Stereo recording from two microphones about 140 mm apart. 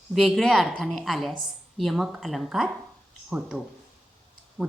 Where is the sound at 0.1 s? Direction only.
Centre (ahead or behind).